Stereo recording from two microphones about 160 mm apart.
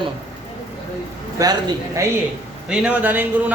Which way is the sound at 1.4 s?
20° right (ahead or behind).